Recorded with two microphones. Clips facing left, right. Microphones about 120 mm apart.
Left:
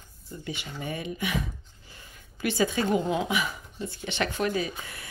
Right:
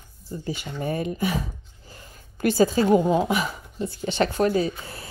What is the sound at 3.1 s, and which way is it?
Speech, 40° right (ahead or behind).